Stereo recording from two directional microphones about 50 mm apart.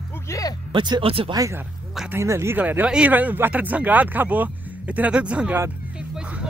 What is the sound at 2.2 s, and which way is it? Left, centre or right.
Speech, right.